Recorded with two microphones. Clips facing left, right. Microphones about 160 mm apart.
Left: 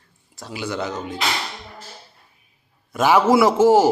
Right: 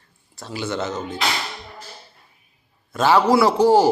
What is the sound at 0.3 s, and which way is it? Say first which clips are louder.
Speech: right 1 dB; 10° left (ahead or behind).